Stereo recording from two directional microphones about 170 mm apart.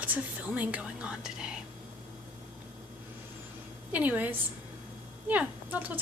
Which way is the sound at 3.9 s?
10° right (ahead or behind).